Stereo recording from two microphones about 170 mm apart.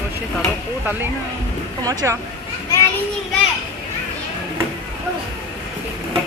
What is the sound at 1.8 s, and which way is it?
Speech, 15° right (ahead or behind).